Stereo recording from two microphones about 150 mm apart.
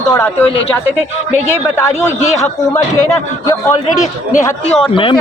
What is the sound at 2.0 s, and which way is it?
A man's voice, 20° left (ahead or behind).